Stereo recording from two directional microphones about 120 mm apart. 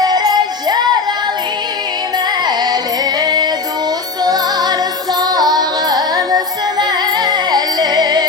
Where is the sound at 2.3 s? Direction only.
35° right (ahead or behind).